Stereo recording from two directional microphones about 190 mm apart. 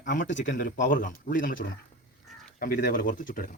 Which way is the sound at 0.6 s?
45° left (ahead or behind).